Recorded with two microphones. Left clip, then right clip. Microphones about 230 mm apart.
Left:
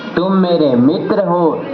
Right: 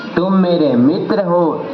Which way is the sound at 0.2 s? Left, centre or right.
Centre.